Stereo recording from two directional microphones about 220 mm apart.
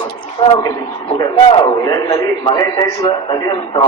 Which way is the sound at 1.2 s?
20° left (ahead or behind).